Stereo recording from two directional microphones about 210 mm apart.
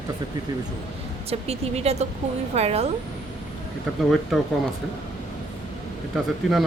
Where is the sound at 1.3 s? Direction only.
30° right (ahead or behind).